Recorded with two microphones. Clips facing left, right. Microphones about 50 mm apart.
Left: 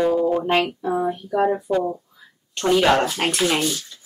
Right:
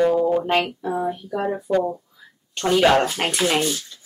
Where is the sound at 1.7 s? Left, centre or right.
Left.